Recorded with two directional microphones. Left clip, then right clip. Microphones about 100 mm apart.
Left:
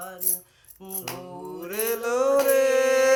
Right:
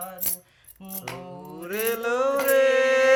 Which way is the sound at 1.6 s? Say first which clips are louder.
Right 1 dB; 15° left (ahead or behind).